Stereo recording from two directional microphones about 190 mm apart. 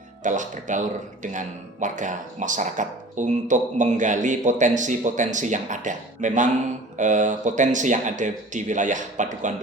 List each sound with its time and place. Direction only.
0.2 s a man's voice: 40° right (ahead or behind)